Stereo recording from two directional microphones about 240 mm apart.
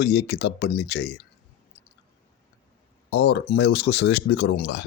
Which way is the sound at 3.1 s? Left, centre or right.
Left.